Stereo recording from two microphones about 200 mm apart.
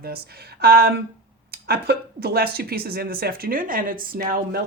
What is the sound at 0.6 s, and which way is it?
Speech, 50° right (ahead or behind).